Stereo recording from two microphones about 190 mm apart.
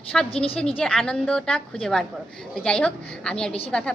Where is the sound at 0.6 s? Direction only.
5° left (ahead or behind).